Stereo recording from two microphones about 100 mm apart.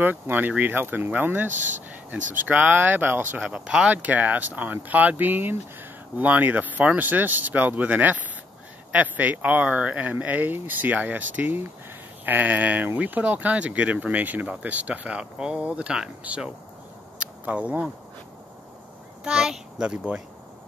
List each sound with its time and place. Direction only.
0.0 s speech: 20° right (ahead or behind)
17.2 s a sound: 10° right (ahead or behind)
19.2 s speech: 5° right (ahead or behind)